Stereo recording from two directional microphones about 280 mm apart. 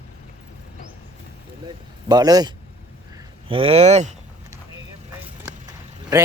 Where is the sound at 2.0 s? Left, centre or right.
Centre.